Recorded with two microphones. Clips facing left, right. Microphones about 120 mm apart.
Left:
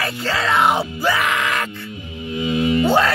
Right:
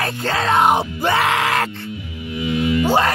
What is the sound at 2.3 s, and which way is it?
Music, 30° left (ahead or behind).